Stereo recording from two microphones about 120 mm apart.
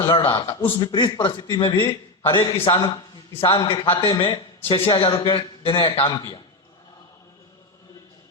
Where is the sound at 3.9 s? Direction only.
25° left (ahead or behind).